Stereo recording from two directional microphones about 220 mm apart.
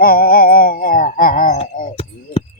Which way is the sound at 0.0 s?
40° left (ahead or behind).